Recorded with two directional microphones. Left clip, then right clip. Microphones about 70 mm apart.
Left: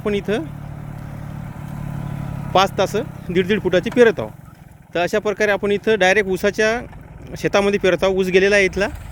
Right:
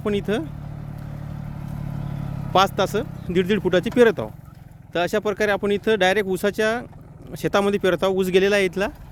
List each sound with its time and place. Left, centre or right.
0.0 s speech: right
1.6 s vehicle: centre
2.5 s speech: right